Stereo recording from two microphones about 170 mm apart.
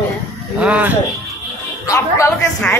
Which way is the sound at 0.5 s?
10° right (ahead or behind).